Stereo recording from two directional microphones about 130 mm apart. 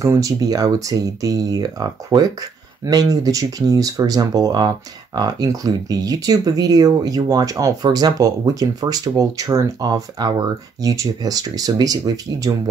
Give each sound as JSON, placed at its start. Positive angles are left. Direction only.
{"t": 0.0, "sound": "speech", "side_deg": -25}